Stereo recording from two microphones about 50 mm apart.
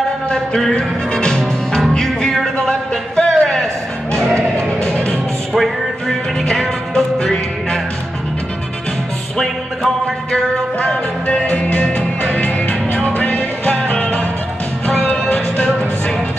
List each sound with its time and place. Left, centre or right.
0.7 s music: centre
5.5 s music: centre
6.4 s music: centre
11.2 s music: left